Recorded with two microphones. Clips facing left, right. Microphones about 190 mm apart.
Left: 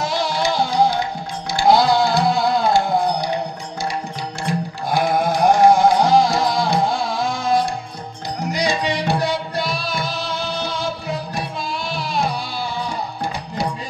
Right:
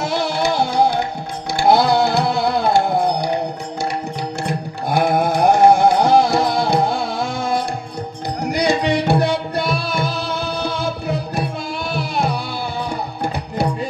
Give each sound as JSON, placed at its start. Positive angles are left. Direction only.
{"t": 0.0, "sound": "music", "side_deg": -60}
{"t": 4.5, "sound": "music", "side_deg": -60}